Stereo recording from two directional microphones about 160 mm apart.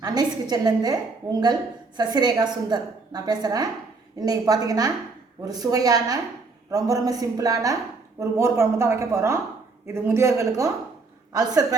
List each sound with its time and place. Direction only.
0.0 s a woman's voice: 25° right (ahead or behind)